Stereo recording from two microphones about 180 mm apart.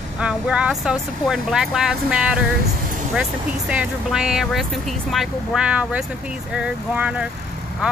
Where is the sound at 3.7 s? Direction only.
5° right (ahead or behind).